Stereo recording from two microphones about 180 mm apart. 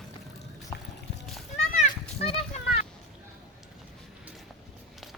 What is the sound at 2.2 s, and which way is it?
Children playing, 30° left (ahead or behind).